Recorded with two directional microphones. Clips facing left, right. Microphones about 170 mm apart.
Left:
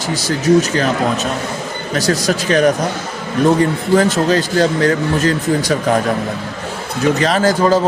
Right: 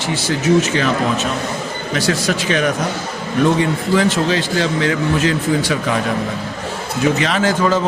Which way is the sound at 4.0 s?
40° left (ahead or behind).